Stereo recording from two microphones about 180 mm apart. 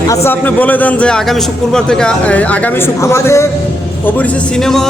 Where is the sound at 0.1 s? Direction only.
15° left (ahead or behind).